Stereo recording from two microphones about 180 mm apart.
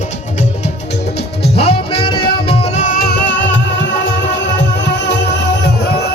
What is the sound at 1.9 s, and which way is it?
Music, 30° left (ahead or behind).